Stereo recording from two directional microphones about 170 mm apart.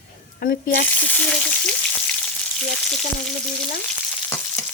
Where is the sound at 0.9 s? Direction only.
10° left (ahead or behind).